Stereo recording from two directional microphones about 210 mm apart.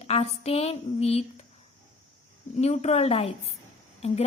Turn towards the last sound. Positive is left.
turn(degrees=30)  # may be behind; listen again after turning